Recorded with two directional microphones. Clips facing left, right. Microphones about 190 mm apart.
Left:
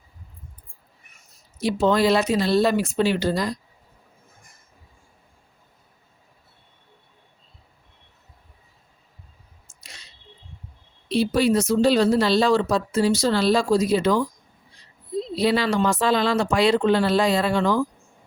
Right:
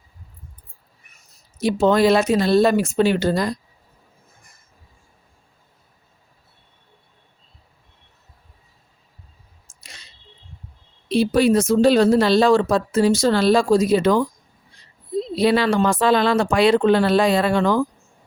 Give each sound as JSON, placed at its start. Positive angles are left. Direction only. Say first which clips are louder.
{"t": 1.5, "sound": "speech", "louder": "right 3 dB", "side_deg": -45}
{"t": 9.8, "sound": "a sound", "louder": "right 1 dB", "side_deg": -50}
{"t": 11.1, "sound": "speech", "louder": "right 3 dB", "side_deg": -55}
{"t": 15.4, "sound": "speech", "louder": "right 3 dB", "side_deg": -55}